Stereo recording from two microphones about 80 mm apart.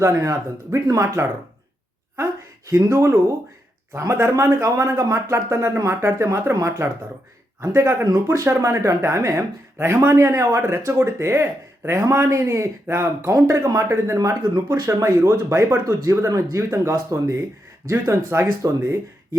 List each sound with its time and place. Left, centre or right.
0.0 s speech: right
2.6 s speech: right
8.0 s speech: right
8.4 s speech: right
14.2 s speech: right